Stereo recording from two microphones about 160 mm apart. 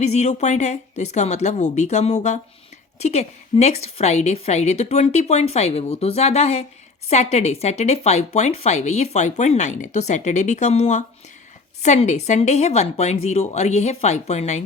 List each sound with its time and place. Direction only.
0.0 s speech: 45° left (ahead or behind)